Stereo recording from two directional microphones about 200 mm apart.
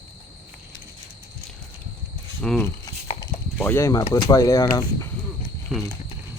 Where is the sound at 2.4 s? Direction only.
5° left (ahead or behind).